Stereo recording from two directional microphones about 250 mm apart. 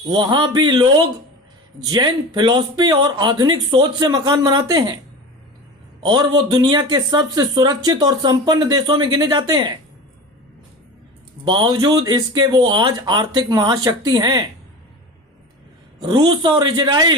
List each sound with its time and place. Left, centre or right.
0.1 s speech: centre
6.1 s speech: centre
11.4 s speech: centre
16.0 s speech: centre